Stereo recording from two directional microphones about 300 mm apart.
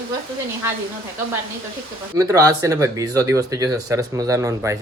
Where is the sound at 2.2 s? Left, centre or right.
Centre.